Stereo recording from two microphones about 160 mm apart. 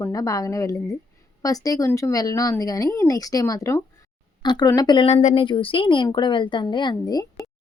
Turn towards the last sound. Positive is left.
turn(degrees=25)  # may be behind; listen again after turning